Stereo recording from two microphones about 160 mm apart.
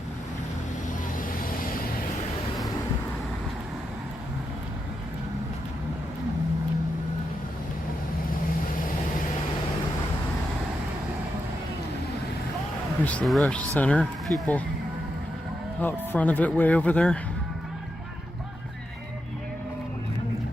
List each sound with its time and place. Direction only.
1.2 s vehicle: 60° left (ahead or behind)
13.1 s speech: 5° left (ahead or behind)
15.8 s speech: 10° left (ahead or behind)